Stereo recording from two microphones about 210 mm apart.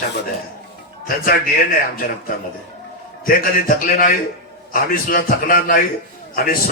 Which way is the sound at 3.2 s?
40° left (ahead or behind).